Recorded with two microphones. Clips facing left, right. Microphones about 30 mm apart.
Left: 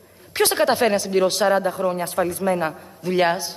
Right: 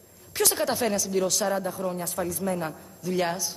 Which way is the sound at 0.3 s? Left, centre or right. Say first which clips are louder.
Left 7 dB; left.